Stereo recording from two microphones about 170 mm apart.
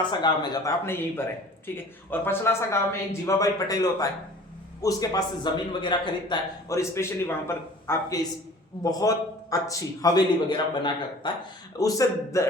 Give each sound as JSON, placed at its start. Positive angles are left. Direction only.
{"t": 0.1, "sound": "a man's voice", "side_deg": 25}